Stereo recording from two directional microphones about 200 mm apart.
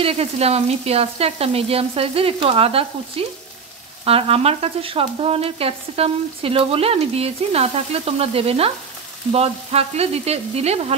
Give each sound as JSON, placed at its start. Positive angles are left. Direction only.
{"t": 0.0, "sound": "frying", "side_deg": -30}